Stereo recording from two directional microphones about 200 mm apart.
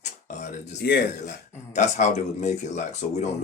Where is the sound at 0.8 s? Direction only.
55° left (ahead or behind).